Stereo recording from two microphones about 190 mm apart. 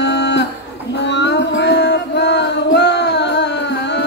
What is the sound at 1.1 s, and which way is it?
Music, 65° left (ahead or behind).